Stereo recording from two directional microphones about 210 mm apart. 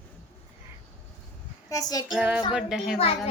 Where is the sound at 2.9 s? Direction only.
30° left (ahead or behind).